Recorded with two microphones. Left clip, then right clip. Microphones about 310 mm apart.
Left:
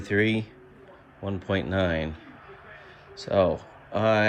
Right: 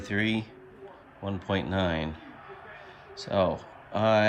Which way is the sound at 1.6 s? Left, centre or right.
Centre.